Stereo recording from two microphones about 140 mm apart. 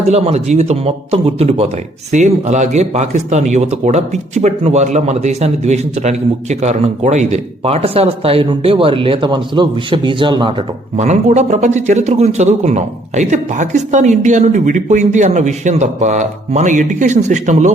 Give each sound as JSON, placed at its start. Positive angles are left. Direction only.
{"t": 0.1, "sound": "speech", "side_deg": -50}
{"t": 2.1, "sound": "speech", "side_deg": -55}
{"t": 10.9, "sound": "speech", "side_deg": -55}